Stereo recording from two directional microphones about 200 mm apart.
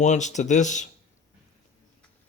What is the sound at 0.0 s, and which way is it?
Speech, 35° left (ahead or behind).